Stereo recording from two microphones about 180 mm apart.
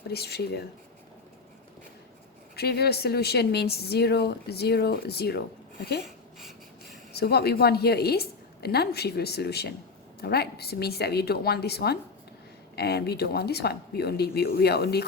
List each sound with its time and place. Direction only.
0.1 s speech: 60° left (ahead or behind)
2.6 s speech: 65° left (ahead or behind)
7.2 s speech: 60° left (ahead or behind)